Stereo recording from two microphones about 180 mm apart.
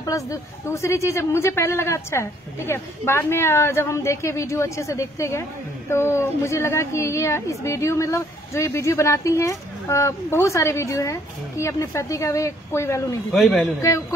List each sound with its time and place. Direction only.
0.0 s a woman's voice: 15° left (ahead or behind)
13.3 s speech: centre (ahead or behind)
13.7 s a woman's voice: 15° left (ahead or behind)